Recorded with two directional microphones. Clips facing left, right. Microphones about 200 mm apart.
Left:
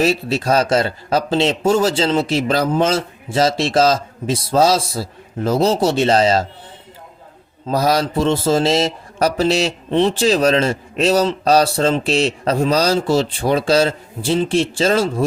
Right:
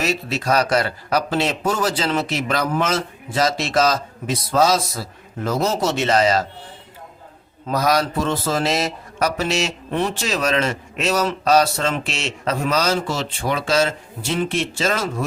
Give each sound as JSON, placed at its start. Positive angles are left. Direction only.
{"t": 0.0, "sound": "a man's voice", "side_deg": 30}
{"t": 7.7, "sound": "speech", "side_deg": 30}